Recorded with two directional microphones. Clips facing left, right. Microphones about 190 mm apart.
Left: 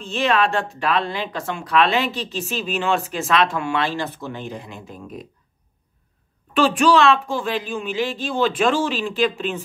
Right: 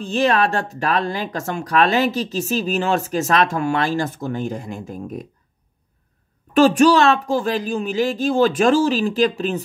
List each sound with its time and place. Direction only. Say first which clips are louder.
0.0 s speech: right 2 dB; 40° right (ahead or behind)
6.5 s speech: right 4 dB; 40° right (ahead or behind)